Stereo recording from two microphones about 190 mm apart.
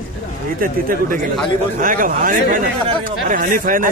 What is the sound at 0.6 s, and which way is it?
Speech, 45° right (ahead or behind).